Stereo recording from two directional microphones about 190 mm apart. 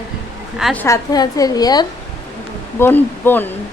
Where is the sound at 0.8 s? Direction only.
20° left (ahead or behind).